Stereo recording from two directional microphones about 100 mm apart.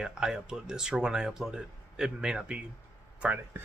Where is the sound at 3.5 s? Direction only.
20° right (ahead or behind).